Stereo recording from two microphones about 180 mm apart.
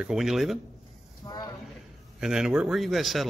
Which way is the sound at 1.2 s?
20° left (ahead or behind).